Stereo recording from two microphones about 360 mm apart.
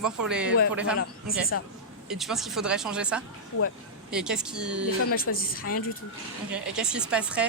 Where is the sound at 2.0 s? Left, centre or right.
Centre.